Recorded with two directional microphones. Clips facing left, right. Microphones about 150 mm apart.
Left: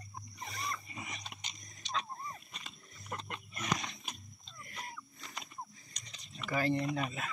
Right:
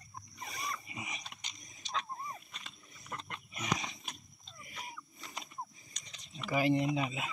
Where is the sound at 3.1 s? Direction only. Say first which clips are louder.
Left 2 dB; 15° left (ahead or behind).